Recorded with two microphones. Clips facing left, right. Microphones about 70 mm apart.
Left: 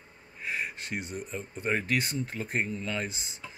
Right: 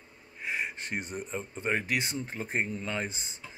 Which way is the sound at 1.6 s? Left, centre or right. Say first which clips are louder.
Left 2 dB; centre.